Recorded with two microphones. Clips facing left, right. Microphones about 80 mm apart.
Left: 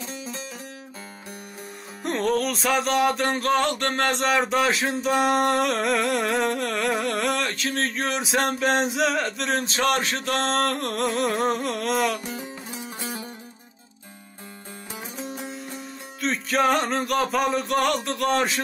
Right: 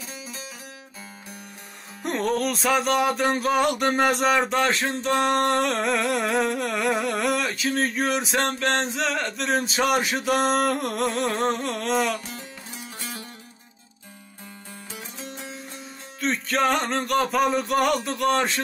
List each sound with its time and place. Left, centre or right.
2.0 s music: centre
13.0 s music: centre
16.2 s music: centre